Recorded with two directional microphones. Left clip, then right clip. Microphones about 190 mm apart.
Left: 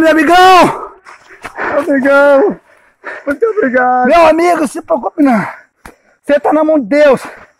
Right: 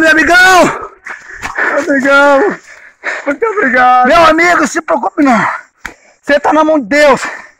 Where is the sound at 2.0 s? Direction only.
10° left (ahead or behind).